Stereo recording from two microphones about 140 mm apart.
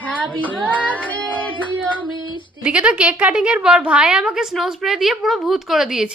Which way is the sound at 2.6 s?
10° right (ahead or behind).